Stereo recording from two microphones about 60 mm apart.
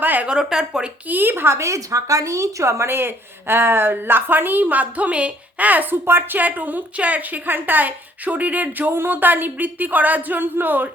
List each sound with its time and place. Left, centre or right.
0.0 s a sound: right
0.3 s speech: centre
1.0 s a woman's voice: right
1.5 s a woman's voice: right